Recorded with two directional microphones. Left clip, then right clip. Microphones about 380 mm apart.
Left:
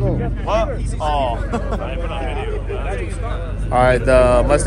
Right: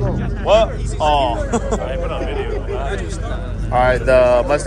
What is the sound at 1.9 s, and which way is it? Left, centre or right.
Speech, right.